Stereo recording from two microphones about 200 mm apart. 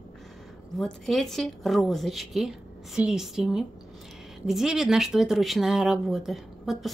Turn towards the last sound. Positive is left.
turn(degrees=0)  # may be behind; listen again after turning